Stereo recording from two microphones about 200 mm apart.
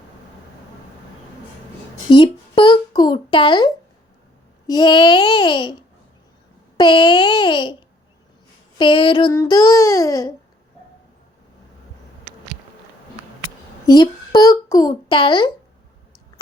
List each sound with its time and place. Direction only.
2.0 s a sound: 25° left (ahead or behind)
4.6 s babbling: 20° left (ahead or behind)
6.7 s babbling: 20° left (ahead or behind)
8.8 s babbling: 25° left (ahead or behind)
9.3 s a child's voice: 15° left (ahead or behind)
13.8 s a child's voice: 20° left (ahead or behind)